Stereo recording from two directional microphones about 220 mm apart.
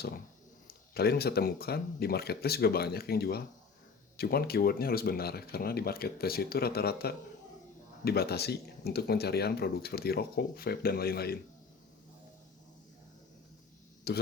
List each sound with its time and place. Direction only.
0.7 s speech: 45° left (ahead or behind)
14.1 s speech: 45° left (ahead or behind)